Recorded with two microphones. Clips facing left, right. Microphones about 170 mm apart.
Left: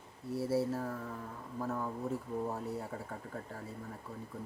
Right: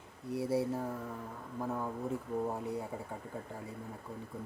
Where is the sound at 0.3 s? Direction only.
15° right (ahead or behind).